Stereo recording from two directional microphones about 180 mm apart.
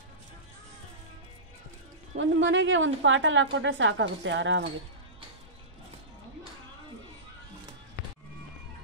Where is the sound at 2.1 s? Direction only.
90° right.